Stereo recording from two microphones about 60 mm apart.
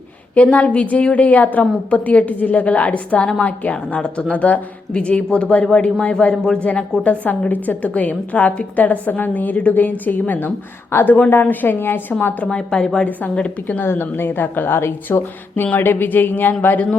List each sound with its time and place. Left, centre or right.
0.3 s a woman's voice: left
12.5 s a woman's voice: centre
13.8 s speech: left